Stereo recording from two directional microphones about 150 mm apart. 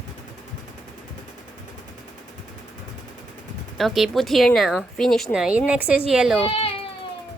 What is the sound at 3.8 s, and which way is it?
Speech, centre (ahead or behind).